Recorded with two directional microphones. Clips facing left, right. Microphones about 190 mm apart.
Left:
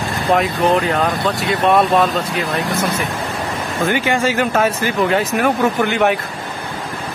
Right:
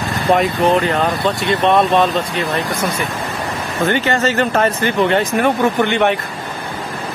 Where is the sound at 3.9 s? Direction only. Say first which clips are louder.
Right 1 dB; 10° left (ahead or behind).